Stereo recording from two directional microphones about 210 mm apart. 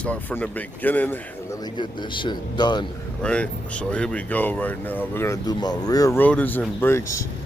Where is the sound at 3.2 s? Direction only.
5° left (ahead or behind).